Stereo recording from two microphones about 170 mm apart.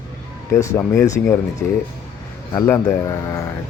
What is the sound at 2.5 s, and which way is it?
Speech, 20° left (ahead or behind).